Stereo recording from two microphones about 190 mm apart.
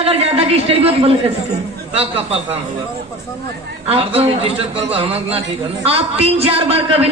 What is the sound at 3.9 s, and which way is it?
A man's voice, 30° right (ahead or behind).